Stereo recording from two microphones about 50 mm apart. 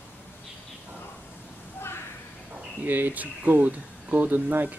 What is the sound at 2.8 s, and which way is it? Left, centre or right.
Speech, right.